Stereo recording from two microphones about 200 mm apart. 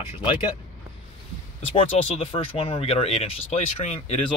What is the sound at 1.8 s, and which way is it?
Speech, 30° left (ahead or behind).